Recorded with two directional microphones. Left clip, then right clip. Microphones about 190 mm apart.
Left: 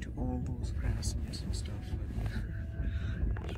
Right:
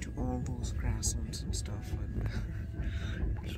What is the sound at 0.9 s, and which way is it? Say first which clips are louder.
Speech: right 3 dB; 45° right (ahead or behind).